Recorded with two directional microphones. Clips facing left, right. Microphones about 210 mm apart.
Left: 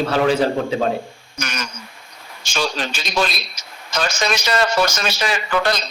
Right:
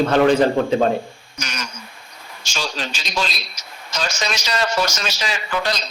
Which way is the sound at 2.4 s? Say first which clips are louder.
Left 4 dB; 55° left (ahead or behind).